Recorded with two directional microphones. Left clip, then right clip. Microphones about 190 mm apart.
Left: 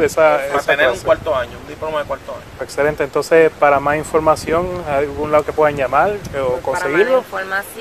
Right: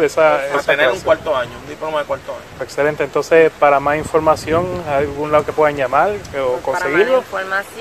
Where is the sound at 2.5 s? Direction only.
10° left (ahead or behind).